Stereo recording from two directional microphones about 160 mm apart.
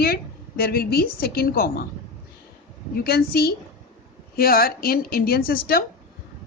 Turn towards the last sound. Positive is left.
turn(degrees=70)  # may be behind; listen again after turning